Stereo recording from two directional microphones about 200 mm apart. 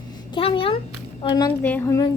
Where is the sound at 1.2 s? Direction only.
25° left (ahead or behind).